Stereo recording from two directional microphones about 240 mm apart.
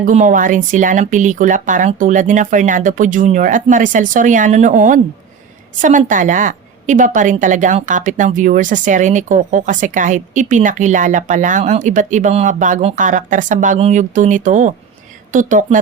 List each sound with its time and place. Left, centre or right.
0.0 s a woman's voice: right